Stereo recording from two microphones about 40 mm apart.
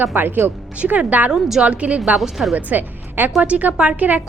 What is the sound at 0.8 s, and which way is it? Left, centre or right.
A woman's voice, right.